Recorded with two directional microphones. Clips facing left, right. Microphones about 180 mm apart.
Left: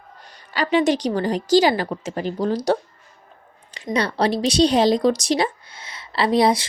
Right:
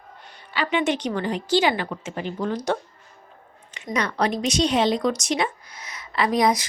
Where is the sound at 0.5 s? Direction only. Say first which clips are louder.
Left 5 dB; 40° left (ahead or behind).